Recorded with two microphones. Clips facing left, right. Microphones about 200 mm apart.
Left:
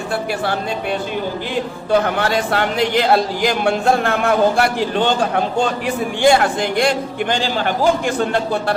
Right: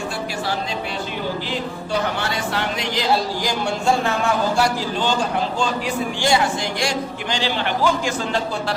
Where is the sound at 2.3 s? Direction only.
55° left (ahead or behind).